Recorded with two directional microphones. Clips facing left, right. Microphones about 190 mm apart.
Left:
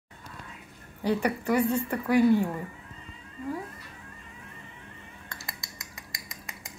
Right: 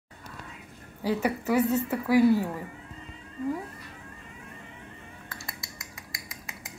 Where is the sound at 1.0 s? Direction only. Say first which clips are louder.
Even; 5° right (ahead or behind).